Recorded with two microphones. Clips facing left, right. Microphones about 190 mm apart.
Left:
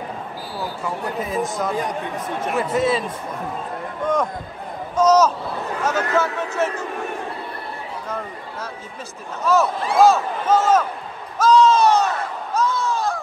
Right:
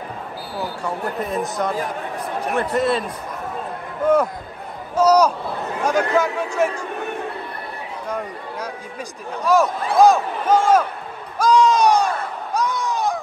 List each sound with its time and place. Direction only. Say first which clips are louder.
0.8 s speech: right 1 dB; centre (ahead or behind)
1.8 s speech: left 1 dB; 20° left (ahead or behind)
2.5 s a man's voice: even; centre (ahead or behind)
9.4 s a man's voice: right 1 dB; 15° right (ahead or behind)
11.3 s a sound: left 1 dB; 15° right (ahead or behind)